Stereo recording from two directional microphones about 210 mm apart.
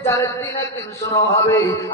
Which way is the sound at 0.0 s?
10° left (ahead or behind).